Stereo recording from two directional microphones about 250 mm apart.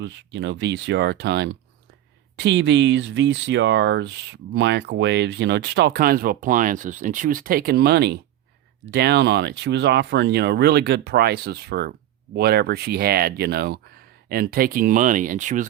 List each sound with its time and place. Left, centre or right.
0.0 s speech: right